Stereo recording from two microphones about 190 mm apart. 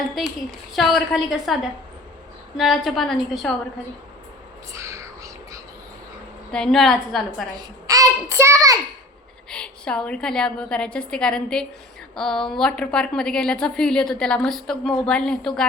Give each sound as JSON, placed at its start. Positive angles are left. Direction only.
{"t": 0.1, "sound": "a woman's voice", "side_deg": 0}
{"t": 2.6, "sound": "a woman's voice", "side_deg": 0}
{"t": 4.7, "sound": "whispering", "side_deg": -15}
{"t": 6.5, "sound": "a woman's voice", "side_deg": 5}
{"t": 7.5, "sound": "a child's voice", "side_deg": -20}
{"t": 9.5, "sound": "a woman's voice", "side_deg": 5}